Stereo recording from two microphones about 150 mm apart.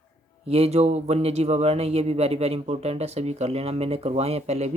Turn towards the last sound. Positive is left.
turn(degrees=-45)  # may be behind; listen again after turning